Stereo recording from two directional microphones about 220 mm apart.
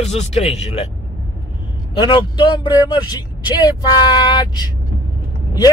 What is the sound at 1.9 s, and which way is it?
Speech, 20° left (ahead or behind).